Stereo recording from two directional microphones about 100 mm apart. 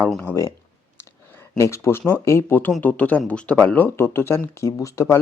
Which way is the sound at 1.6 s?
30° left (ahead or behind).